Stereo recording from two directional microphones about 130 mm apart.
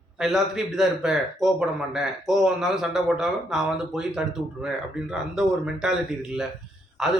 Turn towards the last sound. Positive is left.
turn(degrees=-5)  # may be behind; listen again after turning